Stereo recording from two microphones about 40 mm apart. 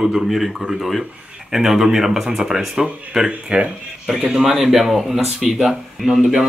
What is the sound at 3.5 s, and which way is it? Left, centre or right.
Speech, right.